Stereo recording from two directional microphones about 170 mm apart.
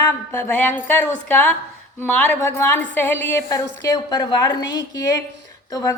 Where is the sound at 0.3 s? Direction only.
10° left (ahead or behind).